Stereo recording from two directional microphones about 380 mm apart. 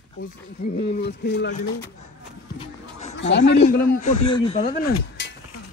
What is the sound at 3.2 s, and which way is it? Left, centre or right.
Speech, left.